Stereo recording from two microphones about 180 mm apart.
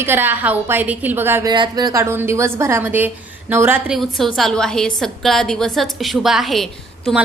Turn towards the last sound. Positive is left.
turn(degrees=0)  # may be behind; listen again after turning